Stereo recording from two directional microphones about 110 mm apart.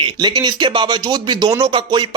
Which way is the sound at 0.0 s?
40° right (ahead or behind).